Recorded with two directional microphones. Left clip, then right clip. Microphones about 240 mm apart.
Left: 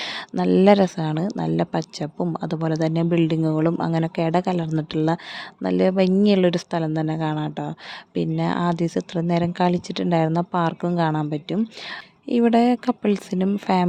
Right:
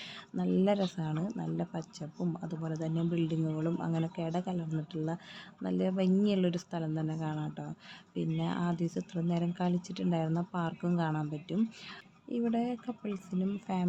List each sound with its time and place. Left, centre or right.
0.0 s speech: left